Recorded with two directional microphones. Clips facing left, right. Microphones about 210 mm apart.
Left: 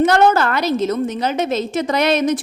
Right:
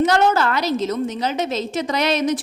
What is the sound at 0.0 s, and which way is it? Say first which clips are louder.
A woman's voice: left 3 dB; 55° left (ahead or behind).